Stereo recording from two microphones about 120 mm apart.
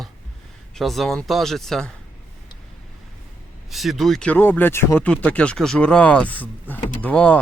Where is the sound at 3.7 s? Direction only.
Centre (ahead or behind).